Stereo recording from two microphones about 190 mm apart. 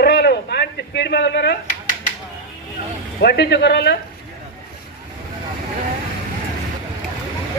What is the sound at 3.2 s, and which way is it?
Speech, 60° left (ahead or behind).